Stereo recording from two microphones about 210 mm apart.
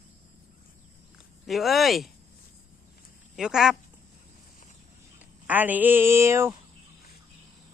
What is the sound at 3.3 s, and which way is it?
Speech, 5° right (ahead or behind).